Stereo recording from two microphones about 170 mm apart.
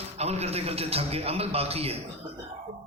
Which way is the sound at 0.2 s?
40° right (ahead or behind).